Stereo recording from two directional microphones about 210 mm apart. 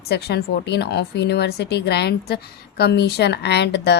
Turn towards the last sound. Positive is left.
turn(degrees=55)  # may be behind; listen again after turning